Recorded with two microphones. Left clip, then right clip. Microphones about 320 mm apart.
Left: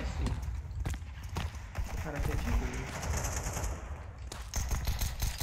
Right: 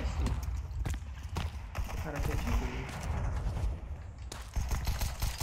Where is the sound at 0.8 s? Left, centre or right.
Centre.